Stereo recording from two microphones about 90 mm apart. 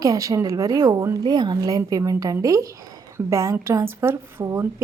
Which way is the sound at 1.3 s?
50° right (ahead or behind).